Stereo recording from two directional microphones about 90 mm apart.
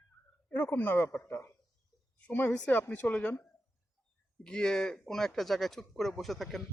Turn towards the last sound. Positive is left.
turn(degrees=0)  # may be behind; listen again after turning